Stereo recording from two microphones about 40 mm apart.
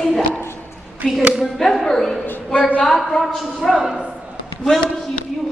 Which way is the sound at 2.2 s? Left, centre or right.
Left.